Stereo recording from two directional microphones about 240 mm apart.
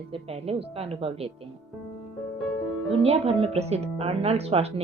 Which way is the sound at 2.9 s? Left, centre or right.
Right.